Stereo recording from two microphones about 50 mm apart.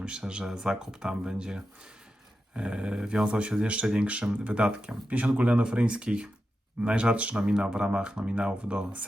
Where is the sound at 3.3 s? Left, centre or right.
Right.